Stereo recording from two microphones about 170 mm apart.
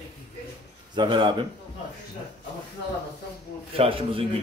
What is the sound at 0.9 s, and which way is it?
Speech, 25° right (ahead or behind).